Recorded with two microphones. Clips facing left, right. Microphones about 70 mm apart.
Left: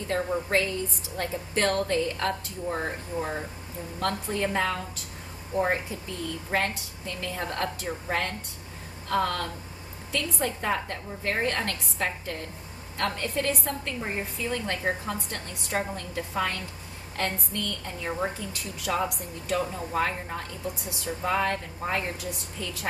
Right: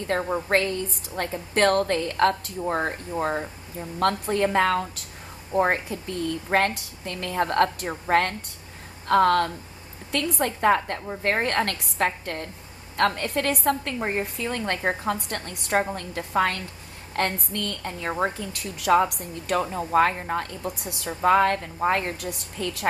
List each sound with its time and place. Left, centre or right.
0.1 s a woman's voice: right